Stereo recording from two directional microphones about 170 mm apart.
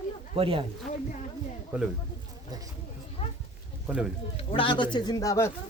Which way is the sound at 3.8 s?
5° right (ahead or behind).